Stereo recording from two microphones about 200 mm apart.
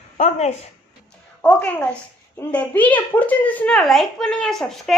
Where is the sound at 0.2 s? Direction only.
35° left (ahead or behind).